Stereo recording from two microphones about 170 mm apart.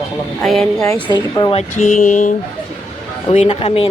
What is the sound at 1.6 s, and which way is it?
Speech, 40° left (ahead or behind).